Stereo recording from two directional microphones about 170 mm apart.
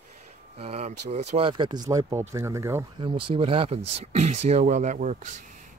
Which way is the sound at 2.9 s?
30° right (ahead or behind).